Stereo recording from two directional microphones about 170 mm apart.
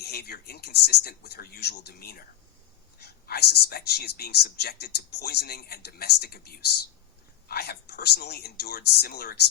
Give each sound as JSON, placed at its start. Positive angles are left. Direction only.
{"t": 0.0, "sound": "speech", "side_deg": 70}